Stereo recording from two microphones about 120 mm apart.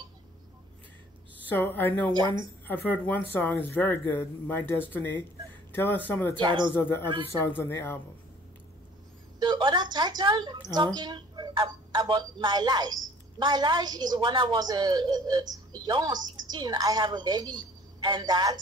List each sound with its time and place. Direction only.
1.5 s speech: 15° left (ahead or behind)
2.0 s a woman's voice: 35° right (ahead or behind)
2.6 s speech: 15° left (ahead or behind)
6.3 s a woman's voice: 40° right (ahead or behind)
6.8 s speech: 20° left (ahead or behind)
9.4 s a sound: 40° right (ahead or behind)
12.0 s a woman's voice: 35° right (ahead or behind)